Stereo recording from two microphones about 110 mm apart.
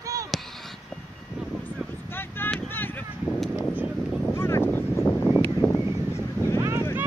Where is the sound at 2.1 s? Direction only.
20° left (ahead or behind).